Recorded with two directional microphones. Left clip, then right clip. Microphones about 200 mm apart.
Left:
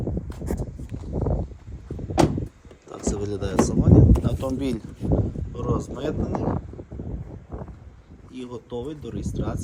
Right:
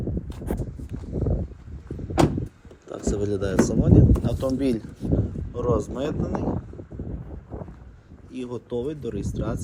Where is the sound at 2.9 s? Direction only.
5° left (ahead or behind).